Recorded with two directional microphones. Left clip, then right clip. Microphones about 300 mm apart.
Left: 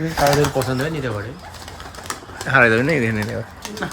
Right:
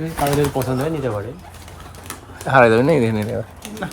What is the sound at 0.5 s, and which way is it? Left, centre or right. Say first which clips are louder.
Speech: even; centre.